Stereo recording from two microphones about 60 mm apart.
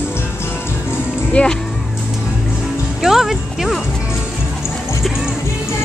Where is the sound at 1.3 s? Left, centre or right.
Centre.